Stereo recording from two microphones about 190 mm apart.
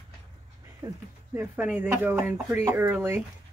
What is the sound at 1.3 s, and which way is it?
Speech, 10° right (ahead or behind).